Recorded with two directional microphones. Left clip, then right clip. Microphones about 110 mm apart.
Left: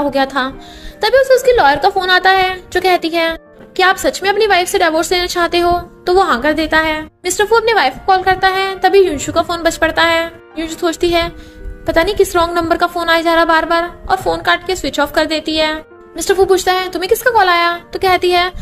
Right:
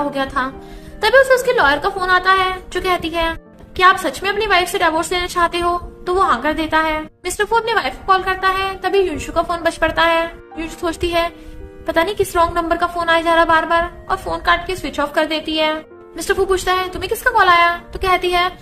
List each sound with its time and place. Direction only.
0.1 s a woman's voice: 50° left (ahead or behind)